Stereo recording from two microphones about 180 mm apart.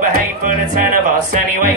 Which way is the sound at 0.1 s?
50° right (ahead or behind).